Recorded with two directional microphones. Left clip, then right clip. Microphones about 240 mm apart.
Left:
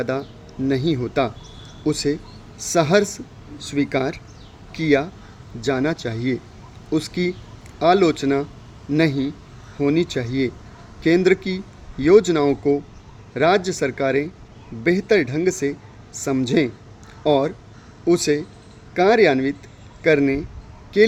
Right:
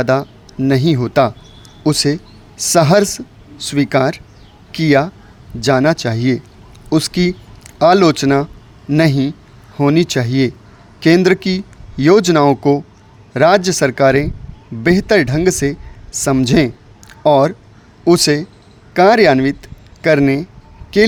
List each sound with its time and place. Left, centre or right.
0.0 s speech: right